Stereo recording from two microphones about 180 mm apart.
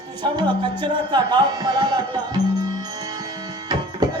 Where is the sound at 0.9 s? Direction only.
25° right (ahead or behind).